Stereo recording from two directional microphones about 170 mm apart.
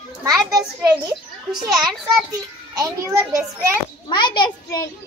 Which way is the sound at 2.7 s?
20° right (ahead or behind).